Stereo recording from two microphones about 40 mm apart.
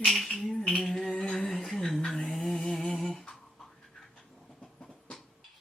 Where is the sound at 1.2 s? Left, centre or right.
Left.